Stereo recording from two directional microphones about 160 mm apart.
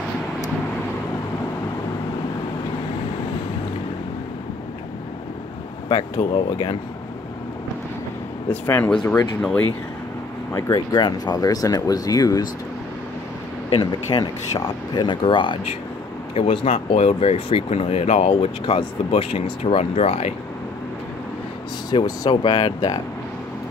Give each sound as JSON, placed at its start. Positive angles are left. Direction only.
{"t": 5.9, "sound": "speech", "side_deg": 30}
{"t": 8.5, "sound": "speech", "side_deg": 10}
{"t": 10.5, "sound": "speech", "side_deg": 25}
{"t": 13.7, "sound": "speech", "side_deg": 30}
{"t": 21.9, "sound": "speech", "side_deg": 25}